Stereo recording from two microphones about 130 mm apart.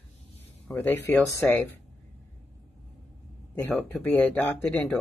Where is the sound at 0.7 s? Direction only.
10° left (ahead or behind).